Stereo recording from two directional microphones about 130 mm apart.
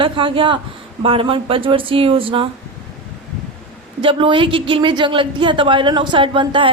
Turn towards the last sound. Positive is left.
turn(degrees=-40)  # may be behind; listen again after turning